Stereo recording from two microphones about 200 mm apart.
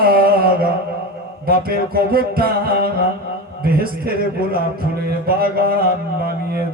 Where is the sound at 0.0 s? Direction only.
50° right (ahead or behind).